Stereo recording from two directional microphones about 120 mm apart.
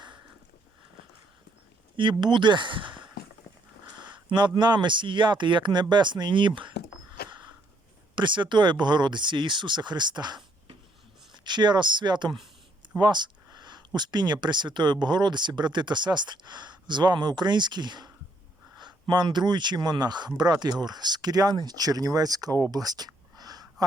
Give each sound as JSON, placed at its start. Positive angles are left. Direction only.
{"t": 2.0, "sound": "speech", "side_deg": -40}
{"t": 4.3, "sound": "speech", "side_deg": -40}
{"t": 8.1, "sound": "speech", "side_deg": -40}
{"t": 11.4, "sound": "speech", "side_deg": -40}
{"t": 13.0, "sound": "a sound", "side_deg": -40}
{"t": 14.4, "sound": "speech", "side_deg": -40}
{"t": 22.7, "sound": "a sound", "side_deg": -35}